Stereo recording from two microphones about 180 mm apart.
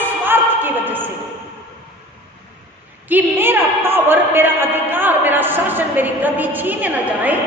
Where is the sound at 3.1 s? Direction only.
10° right (ahead or behind).